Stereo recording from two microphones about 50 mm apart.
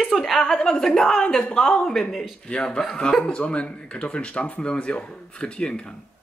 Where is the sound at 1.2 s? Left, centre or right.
Left.